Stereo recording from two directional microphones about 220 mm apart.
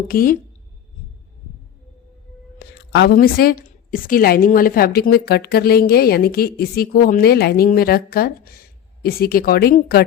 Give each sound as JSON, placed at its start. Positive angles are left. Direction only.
{"t": 0.1, "sound": "speech", "side_deg": 40}
{"t": 2.6, "sound": "a woman's voice", "side_deg": 50}